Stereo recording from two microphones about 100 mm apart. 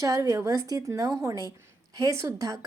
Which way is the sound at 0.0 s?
35° right (ahead or behind).